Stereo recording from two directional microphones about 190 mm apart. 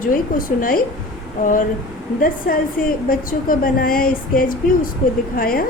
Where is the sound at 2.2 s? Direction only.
50° left (ahead or behind).